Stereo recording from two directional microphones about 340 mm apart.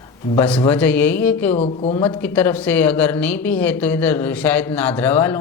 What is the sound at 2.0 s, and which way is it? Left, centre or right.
Speech, centre.